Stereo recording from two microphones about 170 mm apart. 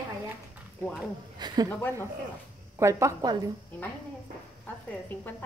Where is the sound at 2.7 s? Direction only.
15° right (ahead or behind).